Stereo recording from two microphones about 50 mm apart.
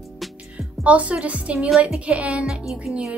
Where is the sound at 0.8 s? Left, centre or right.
Right.